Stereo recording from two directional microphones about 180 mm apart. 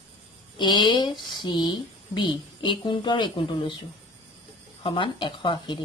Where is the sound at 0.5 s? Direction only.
25° left (ahead or behind).